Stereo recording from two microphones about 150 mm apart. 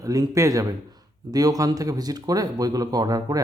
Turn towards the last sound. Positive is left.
turn(degrees=-25)  # may be behind; listen again after turning